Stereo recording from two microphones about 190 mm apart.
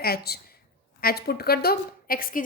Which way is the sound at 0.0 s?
55° left (ahead or behind).